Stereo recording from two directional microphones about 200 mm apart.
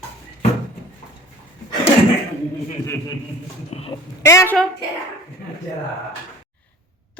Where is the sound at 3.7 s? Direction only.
30° left (ahead or behind).